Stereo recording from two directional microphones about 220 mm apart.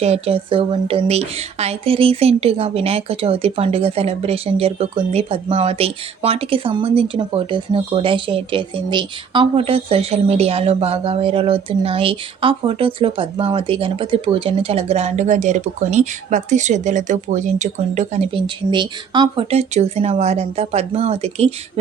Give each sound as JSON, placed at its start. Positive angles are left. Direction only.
{"t": 0.0, "sound": "speech", "side_deg": -30}